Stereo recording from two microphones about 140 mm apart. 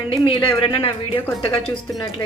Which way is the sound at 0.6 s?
40° left (ahead or behind).